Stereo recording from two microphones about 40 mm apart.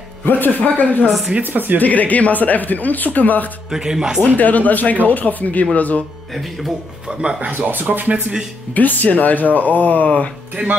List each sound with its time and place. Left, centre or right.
0.2 s speech: left
1.4 s speech: right
1.8 s speech: left
3.7 s speech: centre
4.4 s speech: left
7.5 s speech: right
8.7 s speech: left
10.5 s speech: right